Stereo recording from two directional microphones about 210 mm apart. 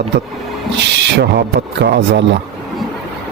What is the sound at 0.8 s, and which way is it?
Speech, 55° right (ahead or behind).